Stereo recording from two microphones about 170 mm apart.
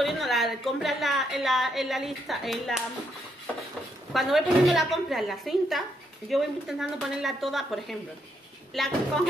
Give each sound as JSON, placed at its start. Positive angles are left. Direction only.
{"t": 0.0, "sound": "a woman's voice", "side_deg": 0}
{"t": 4.1, "sound": "a woman's voice", "side_deg": 0}